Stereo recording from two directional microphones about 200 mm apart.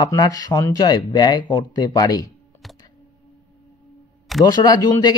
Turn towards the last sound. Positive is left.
turn(degrees=20)  # may be behind; listen again after turning